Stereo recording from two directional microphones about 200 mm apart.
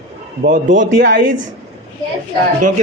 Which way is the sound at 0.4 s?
40° right (ahead or behind).